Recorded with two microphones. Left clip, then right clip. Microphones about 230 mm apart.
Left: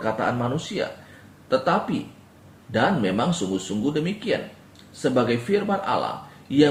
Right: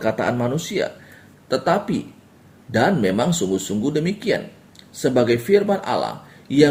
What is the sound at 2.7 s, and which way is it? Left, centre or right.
Speech, right.